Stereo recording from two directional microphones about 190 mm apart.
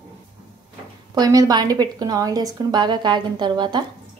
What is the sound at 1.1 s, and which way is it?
A woman's voice, 20° right (ahead or behind).